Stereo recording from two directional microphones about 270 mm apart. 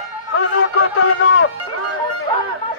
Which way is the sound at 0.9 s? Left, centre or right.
Left.